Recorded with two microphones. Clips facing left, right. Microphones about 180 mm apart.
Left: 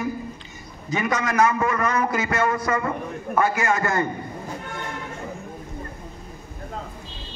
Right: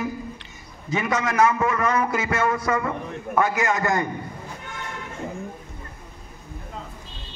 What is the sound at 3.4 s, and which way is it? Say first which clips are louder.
Speech: even; 15° right (ahead or behind).